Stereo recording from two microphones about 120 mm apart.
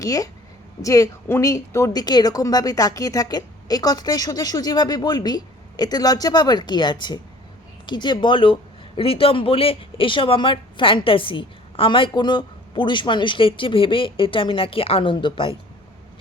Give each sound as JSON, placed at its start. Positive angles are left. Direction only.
{"t": 0.0, "sound": "a woman's voice", "side_deg": 30}